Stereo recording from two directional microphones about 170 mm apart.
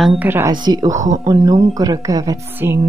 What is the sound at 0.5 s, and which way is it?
Speech, 25° right (ahead or behind).